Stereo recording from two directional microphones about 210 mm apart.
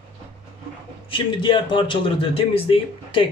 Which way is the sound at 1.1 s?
20° left (ahead or behind).